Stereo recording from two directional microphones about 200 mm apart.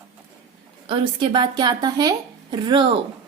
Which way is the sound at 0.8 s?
25° right (ahead or behind).